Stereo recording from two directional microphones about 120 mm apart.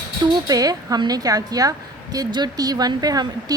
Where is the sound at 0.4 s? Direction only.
30° right (ahead or behind).